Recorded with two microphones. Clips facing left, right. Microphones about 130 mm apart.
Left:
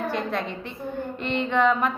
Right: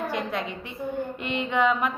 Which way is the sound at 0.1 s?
15° right (ahead or behind).